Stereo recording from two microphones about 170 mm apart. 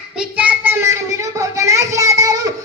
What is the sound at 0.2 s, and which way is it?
Child singing, 10° right (ahead or behind).